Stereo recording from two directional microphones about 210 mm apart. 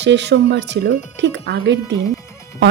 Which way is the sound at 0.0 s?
55° right (ahead or behind).